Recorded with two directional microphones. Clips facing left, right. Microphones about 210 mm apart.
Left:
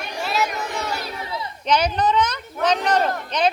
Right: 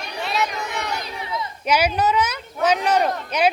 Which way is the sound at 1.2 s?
30° left (ahead or behind).